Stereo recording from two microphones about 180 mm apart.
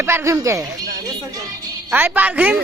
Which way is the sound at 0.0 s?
15° right (ahead or behind).